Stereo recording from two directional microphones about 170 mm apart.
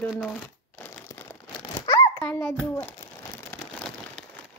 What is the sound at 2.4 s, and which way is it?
Speech, 10° left (ahead or behind).